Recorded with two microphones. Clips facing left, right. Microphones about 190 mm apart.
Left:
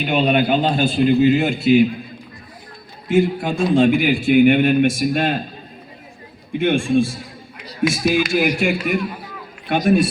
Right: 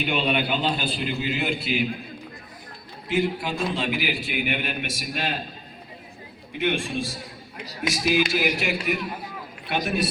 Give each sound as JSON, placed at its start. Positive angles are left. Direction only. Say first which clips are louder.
{"t": 0.0, "sound": "a man's voice", "louder": "left 7 dB", "side_deg": 45}
{"t": 3.1, "sound": "a man's voice", "louder": "left 7 dB", "side_deg": 50}
{"t": 6.5, "sound": "a man's voice", "louder": "left 9 dB", "side_deg": 50}